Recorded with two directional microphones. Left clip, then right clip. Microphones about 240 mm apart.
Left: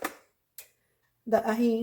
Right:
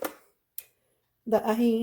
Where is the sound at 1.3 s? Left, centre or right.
Right.